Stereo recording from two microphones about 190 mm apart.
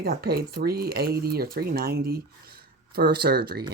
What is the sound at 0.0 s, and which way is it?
Speech, 55° right (ahead or behind).